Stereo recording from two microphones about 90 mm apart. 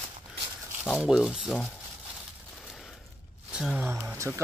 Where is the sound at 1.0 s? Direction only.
5° right (ahead or behind).